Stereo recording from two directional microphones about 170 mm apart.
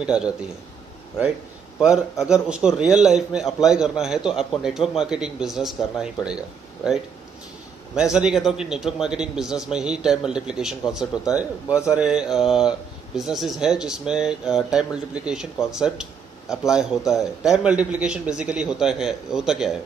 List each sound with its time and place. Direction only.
0.0 s a man's voice: 5° right (ahead or behind)
1.8 s a man's voice: 5° right (ahead or behind)